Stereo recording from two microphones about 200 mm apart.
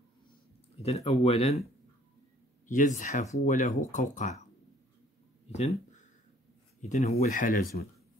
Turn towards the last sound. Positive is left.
turn(degrees=45)  # may be behind; listen again after turning